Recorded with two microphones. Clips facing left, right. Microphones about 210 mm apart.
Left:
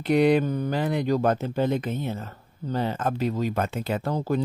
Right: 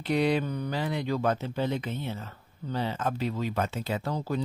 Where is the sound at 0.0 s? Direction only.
50° left (ahead or behind).